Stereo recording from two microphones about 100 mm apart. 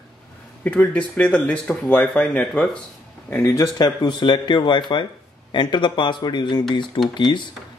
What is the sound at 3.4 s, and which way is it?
Speech, 35° left (ahead or behind).